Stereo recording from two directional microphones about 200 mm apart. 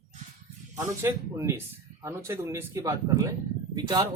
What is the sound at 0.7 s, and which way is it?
Speech, 15° right (ahead or behind).